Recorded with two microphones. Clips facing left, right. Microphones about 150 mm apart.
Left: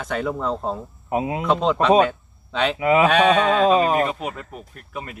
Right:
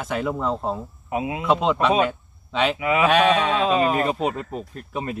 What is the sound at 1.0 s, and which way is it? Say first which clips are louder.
Speech: left 3 dB; 35° left (ahead or behind).